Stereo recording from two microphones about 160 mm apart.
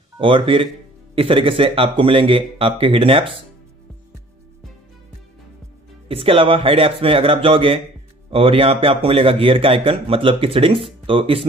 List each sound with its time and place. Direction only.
0.2 s speech: 35° right (ahead or behind)
6.0 s speech: 35° right (ahead or behind)